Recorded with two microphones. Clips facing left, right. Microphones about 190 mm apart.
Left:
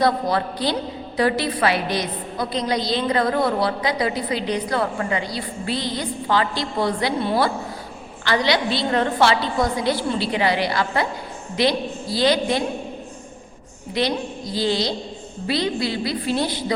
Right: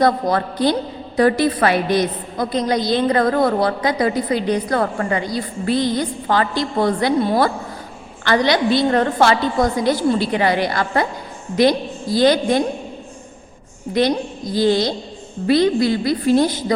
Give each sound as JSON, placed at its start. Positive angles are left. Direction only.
{"t": 0.0, "sound": "a woman's voice", "side_deg": -50}
{"t": 13.9, "sound": "a woman's voice", "side_deg": -50}